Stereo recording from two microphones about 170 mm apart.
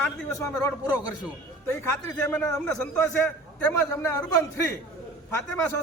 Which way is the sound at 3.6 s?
15° left (ahead or behind).